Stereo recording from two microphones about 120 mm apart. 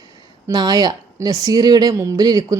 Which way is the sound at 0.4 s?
30° right (ahead or behind).